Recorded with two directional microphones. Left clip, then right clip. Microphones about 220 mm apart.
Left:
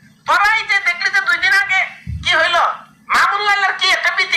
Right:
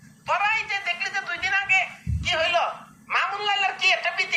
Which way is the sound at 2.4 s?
15° left (ahead or behind).